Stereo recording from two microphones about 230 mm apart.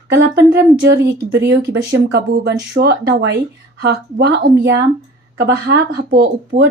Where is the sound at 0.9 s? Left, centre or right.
Right.